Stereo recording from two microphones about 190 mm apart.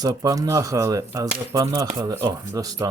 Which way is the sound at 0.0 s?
20° right (ahead or behind).